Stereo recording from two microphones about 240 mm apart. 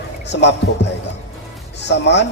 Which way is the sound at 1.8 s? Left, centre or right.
Left.